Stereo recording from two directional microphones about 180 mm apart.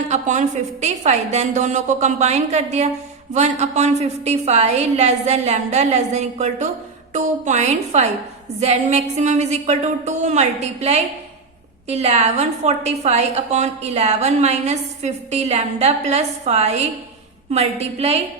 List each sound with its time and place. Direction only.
0.1 s a woman's voice: 40° right (ahead or behind)